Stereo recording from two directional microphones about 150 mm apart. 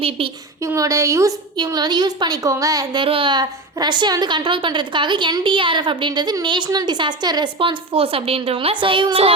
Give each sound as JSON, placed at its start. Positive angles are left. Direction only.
{"t": 0.6, "sound": "a woman's voice", "side_deg": -20}